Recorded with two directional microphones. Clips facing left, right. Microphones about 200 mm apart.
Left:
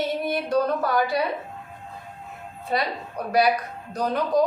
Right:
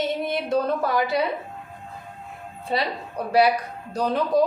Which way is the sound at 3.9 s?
30° right (ahead or behind).